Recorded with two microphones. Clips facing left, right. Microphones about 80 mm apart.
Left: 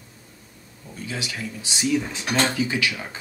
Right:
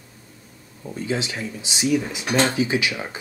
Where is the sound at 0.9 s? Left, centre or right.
Right.